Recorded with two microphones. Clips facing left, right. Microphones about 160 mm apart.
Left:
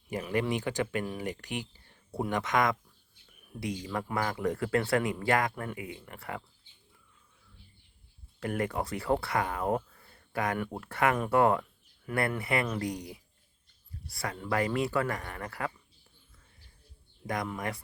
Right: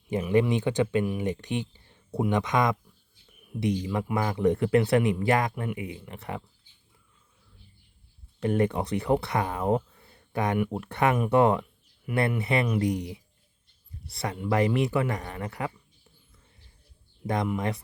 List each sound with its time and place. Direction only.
0.1 s speech: 20° right (ahead or behind)
8.4 s speech: 25° right (ahead or behind)
17.2 s speech: 25° right (ahead or behind)